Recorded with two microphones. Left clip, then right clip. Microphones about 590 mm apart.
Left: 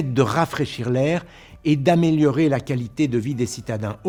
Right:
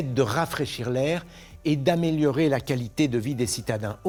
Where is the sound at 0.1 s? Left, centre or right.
Left.